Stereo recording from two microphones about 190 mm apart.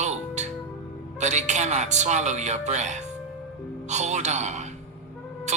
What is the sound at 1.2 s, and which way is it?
Speech, 40° right (ahead or behind).